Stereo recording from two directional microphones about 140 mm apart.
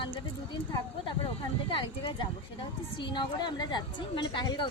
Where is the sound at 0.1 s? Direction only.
35° left (ahead or behind).